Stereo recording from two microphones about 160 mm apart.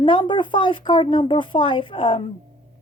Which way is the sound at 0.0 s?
30° left (ahead or behind).